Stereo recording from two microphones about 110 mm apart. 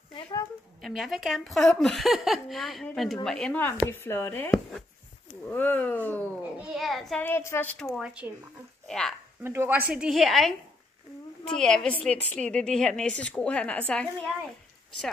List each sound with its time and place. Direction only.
0.7 s a woman's voice: centre (ahead or behind)
3.5 s speech: 20° left (ahead or behind)
4.5 s speech: centre (ahead or behind)
5.3 s a woman's voice: 15° left (ahead or behind)
6.6 s speech: centre (ahead or behind)
7.2 s speech: 20° left (ahead or behind)
8.0 s speech: 10° right (ahead or behind)
8.8 s a sound: 5° left (ahead or behind)
9.4 s a woman's voice: 25° right (ahead or behind); by 14.0 s 10° left (ahead or behind)